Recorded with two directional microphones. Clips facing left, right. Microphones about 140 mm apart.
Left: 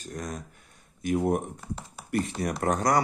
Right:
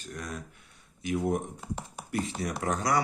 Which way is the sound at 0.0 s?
40° left (ahead or behind).